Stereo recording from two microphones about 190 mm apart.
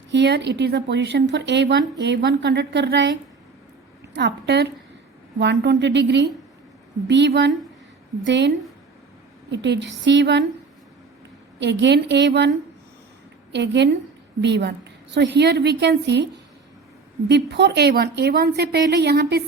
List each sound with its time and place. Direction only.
0.1 s a woman's voice: 65° right (ahead or behind)
4.1 s a woman's voice: 65° right (ahead or behind)
11.6 s a woman's voice: 65° right (ahead or behind)
13.5 s a woman's voice: 65° right (ahead or behind)
17.2 s a woman's voice: 65° right (ahead or behind)